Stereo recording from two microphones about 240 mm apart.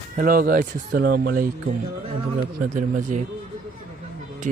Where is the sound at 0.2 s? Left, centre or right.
Right.